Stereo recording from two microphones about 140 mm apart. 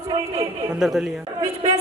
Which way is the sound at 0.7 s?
5° right (ahead or behind).